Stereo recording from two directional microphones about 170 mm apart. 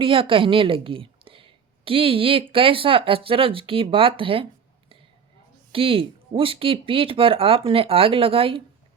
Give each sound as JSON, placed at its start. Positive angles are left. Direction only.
{"t": 0.0, "sound": "a woman's voice", "side_deg": -30}
{"t": 5.7, "sound": "a woman's voice", "side_deg": -30}